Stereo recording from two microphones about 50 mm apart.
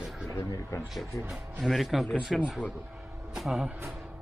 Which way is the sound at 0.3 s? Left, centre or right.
Left.